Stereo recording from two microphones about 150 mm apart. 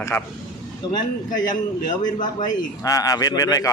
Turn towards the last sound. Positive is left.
turn(degrees=25)  # may be behind; listen again after turning